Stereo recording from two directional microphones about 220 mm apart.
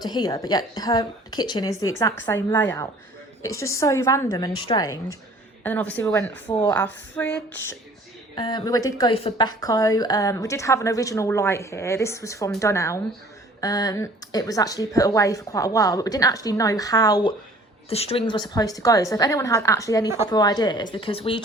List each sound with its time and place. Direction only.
0.0 s a woman's voice: 20° left (ahead or behind)
8.4 s a woman's voice: 20° left (ahead or behind)